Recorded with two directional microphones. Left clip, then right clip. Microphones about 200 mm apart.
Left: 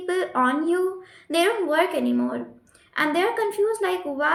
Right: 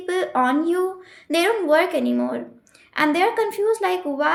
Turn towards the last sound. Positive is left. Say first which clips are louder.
# right 2 dB
turn(degrees=-35)  # may be behind; listen again after turning